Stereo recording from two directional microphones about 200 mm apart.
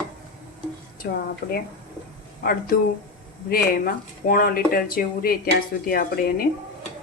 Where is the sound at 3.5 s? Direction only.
45° left (ahead or behind).